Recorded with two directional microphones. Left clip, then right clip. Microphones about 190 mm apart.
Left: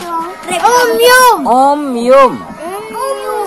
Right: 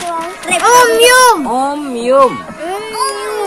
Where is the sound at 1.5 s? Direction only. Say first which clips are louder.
Left 7 dB; 25° left (ahead or behind).